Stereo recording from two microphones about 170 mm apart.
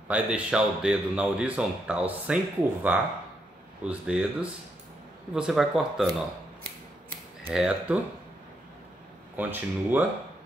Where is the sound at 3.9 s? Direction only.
5° right (ahead or behind).